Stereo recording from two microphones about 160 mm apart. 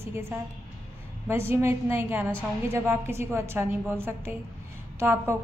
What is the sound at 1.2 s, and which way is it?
A woman's voice, 15° right (ahead or behind).